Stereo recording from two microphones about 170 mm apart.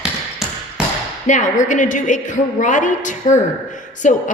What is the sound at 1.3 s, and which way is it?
A woman's voice, 45° left (ahead or behind).